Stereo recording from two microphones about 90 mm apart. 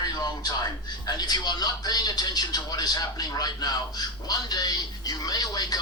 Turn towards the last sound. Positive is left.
turn(degrees=45)  # may be behind; listen again after turning